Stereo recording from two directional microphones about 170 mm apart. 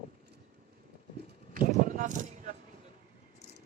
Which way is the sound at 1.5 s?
55° right (ahead or behind).